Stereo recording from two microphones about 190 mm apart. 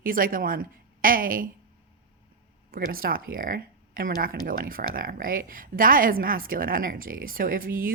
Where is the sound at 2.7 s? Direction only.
50° right (ahead or behind).